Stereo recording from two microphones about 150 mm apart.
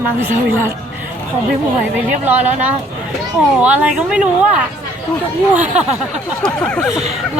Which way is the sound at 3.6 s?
10° right (ahead or behind).